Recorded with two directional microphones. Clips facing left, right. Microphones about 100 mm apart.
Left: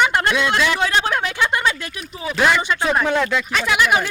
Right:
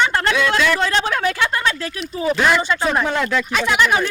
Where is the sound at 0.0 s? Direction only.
15° left (ahead or behind); by 3.8 s centre (ahead or behind).